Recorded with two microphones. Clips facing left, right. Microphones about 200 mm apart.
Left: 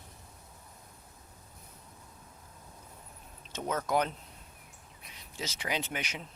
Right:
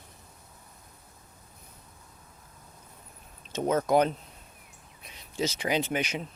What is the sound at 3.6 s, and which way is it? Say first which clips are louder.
Speech: right 7 dB; 25° right (ahead or behind).